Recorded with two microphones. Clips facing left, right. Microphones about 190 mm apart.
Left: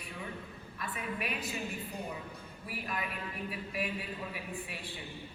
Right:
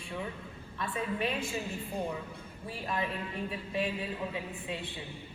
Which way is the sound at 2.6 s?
30° right (ahead or behind).